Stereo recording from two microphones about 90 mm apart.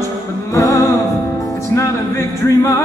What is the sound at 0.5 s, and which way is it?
Music, 35° left (ahead or behind).